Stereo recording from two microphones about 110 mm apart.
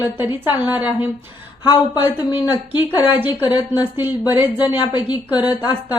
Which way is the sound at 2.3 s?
45° left (ahead or behind).